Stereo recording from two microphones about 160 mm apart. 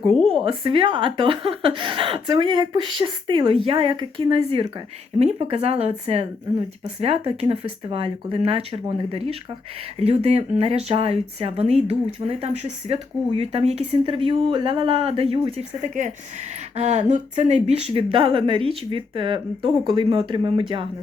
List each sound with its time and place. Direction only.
0.4 s speech: 35° right (ahead or behind)
16.0 s speech: 50° right (ahead or behind); by 20.8 s 30° right (ahead or behind)